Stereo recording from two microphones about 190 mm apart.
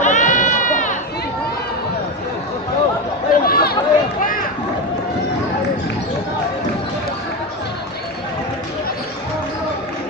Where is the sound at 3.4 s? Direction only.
55° left (ahead or behind).